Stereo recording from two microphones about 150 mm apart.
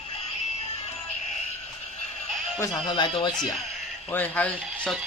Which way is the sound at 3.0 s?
30° left (ahead or behind).